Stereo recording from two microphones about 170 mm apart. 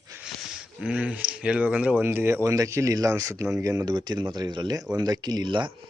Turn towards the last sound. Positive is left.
turn(degrees=-30)  # may be behind; listen again after turning